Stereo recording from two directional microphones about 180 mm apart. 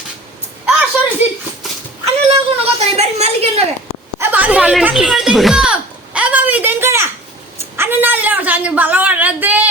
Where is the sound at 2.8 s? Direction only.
35° right (ahead or behind).